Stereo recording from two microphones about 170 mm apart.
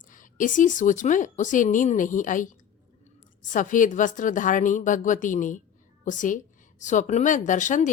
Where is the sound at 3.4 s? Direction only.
50° left (ahead or behind).